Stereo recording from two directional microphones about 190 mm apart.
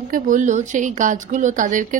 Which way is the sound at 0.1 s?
40° right (ahead or behind).